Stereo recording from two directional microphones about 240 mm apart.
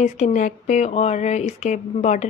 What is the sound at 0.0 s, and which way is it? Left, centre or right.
Speech, left.